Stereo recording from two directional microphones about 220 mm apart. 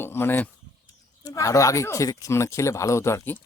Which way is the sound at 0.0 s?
10° left (ahead or behind).